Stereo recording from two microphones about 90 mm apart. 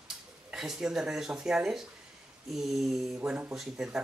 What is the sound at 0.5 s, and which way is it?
Speech, 5° right (ahead or behind).